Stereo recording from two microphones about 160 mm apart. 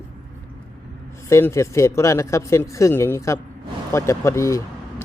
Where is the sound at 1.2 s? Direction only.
15° left (ahead or behind).